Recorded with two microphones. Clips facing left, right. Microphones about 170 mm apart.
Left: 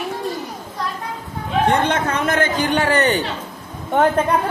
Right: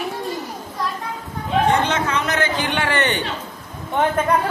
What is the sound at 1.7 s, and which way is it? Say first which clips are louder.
Speech: left 1 dB; 55° left (ahead or behind).